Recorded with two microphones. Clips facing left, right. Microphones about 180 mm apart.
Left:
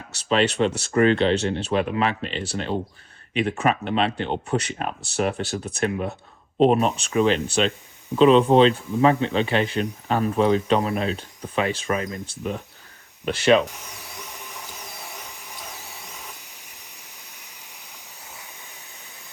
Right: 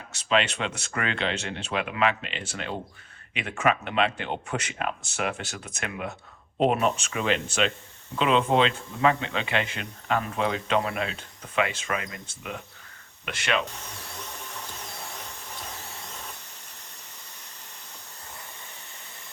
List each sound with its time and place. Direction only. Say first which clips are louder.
0.3 s speech: left 5 dB; 35° left (ahead or behind)
13.7 s dental drill: even; 15° left (ahead or behind)
15.1 s vacuum cleaner: even; 15° left (ahead or behind)